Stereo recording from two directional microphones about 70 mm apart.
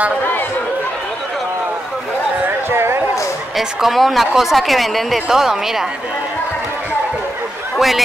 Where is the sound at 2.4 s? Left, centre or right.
Right.